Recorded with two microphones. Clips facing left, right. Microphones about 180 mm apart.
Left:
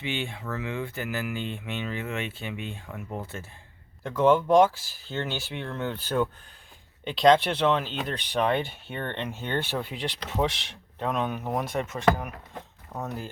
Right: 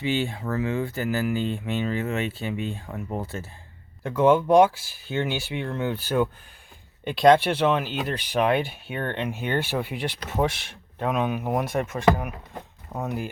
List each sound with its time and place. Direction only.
0.0 s speech: 40° right (ahead or behind)
4.0 s speech: 10° right (ahead or behind)